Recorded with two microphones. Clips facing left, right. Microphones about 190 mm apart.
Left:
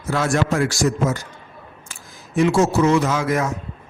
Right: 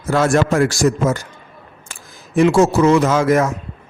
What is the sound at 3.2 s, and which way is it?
Speech, 50° right (ahead or behind).